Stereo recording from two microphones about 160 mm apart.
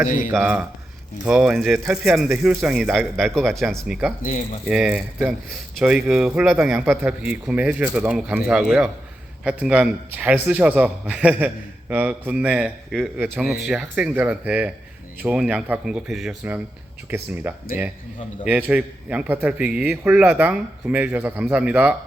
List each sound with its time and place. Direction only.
0.4 s a man's voice: 10° right (ahead or behind)
4.2 s speech: 50° left (ahead or behind)
4.7 s a man's voice: 5° right (ahead or behind)
17.1 s a man's voice: 15° right (ahead or behind)
18.4 s a man's voice: 10° right (ahead or behind)